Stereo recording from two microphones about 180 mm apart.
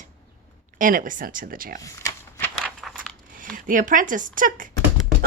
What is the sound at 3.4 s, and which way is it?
Speech, 50° right (ahead or behind).